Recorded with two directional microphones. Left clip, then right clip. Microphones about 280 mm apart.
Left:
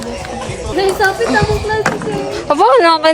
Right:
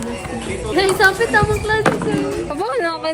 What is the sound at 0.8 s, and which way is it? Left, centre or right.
Speech, centre.